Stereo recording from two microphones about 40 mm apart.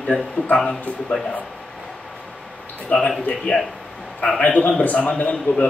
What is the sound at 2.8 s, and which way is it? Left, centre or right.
Speech, left.